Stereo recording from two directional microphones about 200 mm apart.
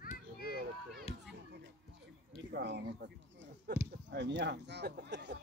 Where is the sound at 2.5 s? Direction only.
55° right (ahead or behind).